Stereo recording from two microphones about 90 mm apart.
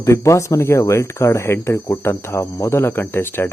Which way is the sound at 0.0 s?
35° left (ahead or behind).